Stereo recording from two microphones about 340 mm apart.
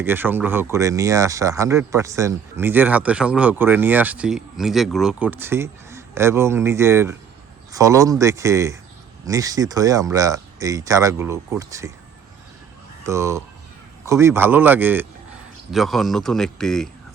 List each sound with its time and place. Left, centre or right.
0.0 s speech: centre
13.1 s speech: centre